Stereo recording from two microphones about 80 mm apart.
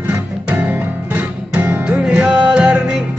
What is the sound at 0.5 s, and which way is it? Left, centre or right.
Music, centre.